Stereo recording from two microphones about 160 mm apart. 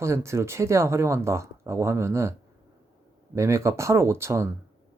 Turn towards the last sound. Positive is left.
turn(degrees=-15)  # may be behind; listen again after turning